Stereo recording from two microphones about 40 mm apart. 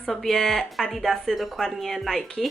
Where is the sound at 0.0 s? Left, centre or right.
Centre.